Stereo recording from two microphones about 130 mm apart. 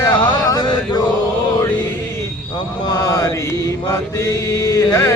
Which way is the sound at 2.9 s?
25° left (ahead or behind).